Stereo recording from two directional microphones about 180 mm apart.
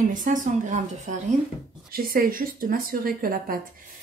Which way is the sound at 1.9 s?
55° right (ahead or behind).